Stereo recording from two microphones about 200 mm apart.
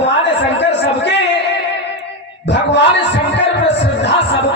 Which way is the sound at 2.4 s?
60° left (ahead or behind).